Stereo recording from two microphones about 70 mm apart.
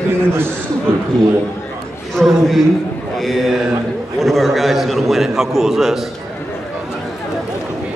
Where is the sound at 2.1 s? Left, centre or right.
Centre.